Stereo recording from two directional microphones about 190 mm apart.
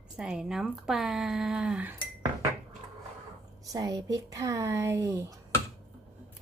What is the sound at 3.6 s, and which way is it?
A woman's voice, 20° right (ahead or behind).